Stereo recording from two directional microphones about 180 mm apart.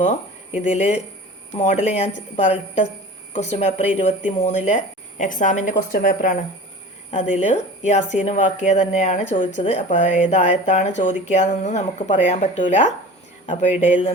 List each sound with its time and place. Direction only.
0.0 s a woman's voice: 40° left (ahead or behind)